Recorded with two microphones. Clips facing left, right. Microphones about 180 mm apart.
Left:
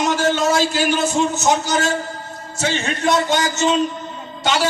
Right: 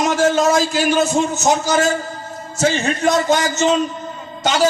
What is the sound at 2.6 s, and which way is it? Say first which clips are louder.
A man's voice: right 4 dB; 40° right (ahead or behind).